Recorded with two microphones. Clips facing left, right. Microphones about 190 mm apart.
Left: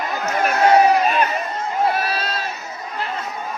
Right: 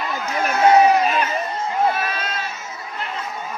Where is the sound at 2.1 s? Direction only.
35° left (ahead or behind).